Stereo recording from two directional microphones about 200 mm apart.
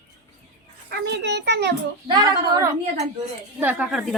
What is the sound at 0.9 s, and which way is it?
Speech, 55° right (ahead or behind).